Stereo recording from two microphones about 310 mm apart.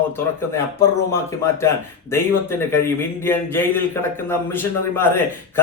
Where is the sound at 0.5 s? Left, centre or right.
Centre.